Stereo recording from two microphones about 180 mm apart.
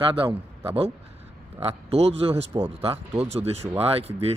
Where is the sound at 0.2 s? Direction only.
30° right (ahead or behind).